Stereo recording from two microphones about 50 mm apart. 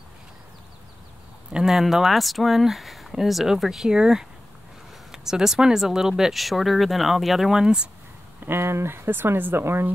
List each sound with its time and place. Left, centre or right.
1.5 s speech: centre
7.6 s speech: centre
8.4 s speech: right